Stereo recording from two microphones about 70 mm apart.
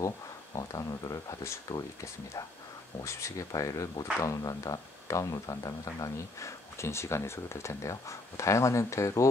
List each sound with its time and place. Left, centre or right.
0.6 s speech: left
3.0 s speech: left
6.8 s speech: left